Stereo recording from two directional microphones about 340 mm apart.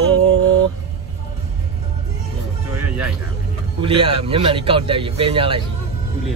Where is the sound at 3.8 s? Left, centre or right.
Centre.